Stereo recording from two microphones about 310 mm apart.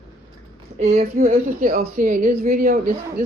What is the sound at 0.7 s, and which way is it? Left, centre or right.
Speech, right.